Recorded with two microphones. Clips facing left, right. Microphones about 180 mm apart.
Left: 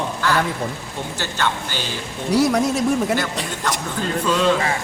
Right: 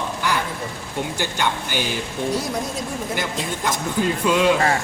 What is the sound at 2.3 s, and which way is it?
Speech, 75° left (ahead or behind).